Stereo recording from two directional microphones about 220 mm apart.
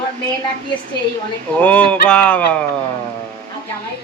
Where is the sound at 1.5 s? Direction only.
5° left (ahead or behind).